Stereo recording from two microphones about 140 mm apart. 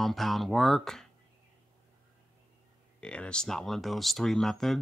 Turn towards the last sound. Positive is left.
turn(degrees=0)  # may be behind; listen again after turning